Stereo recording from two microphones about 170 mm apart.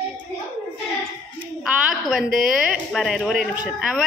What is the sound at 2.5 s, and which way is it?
Speech, 5° right (ahead or behind).